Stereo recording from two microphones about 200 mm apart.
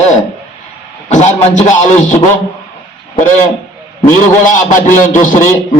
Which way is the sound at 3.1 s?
35° left (ahead or behind).